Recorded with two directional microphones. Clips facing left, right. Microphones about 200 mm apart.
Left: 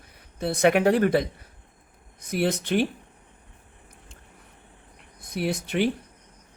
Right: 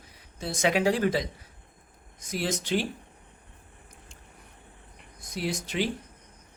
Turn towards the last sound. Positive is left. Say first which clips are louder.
# left 5 dB
turn(degrees=55)  # may be behind; listen again after turning